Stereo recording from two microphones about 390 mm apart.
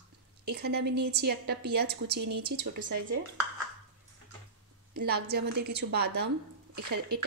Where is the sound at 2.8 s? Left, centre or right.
Right.